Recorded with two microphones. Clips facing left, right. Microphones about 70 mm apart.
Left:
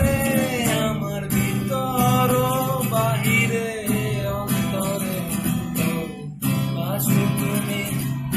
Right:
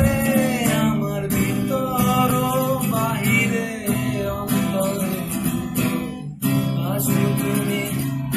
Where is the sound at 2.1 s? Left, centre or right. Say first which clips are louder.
Right 1 dB; centre.